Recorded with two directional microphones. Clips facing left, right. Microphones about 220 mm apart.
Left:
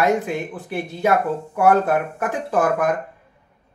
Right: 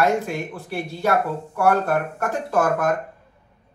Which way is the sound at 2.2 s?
15° left (ahead or behind).